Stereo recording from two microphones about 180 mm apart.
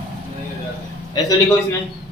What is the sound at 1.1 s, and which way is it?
Speech, 20° left (ahead or behind).